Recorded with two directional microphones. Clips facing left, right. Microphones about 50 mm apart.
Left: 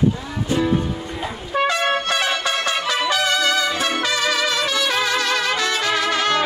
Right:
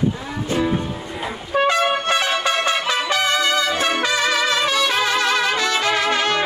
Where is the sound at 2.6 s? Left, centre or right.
Right.